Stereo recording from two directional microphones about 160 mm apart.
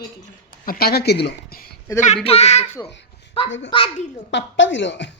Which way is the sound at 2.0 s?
40° left (ahead or behind).